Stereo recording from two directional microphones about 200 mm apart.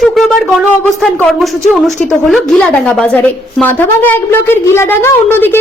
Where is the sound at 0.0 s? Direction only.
Centre (ahead or behind).